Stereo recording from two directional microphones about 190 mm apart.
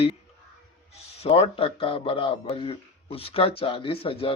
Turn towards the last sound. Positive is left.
turn(degrees=30)  # may be behind; listen again after turning